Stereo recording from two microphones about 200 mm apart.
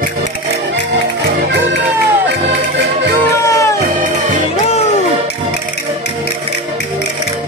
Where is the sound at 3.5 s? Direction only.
15° left (ahead or behind).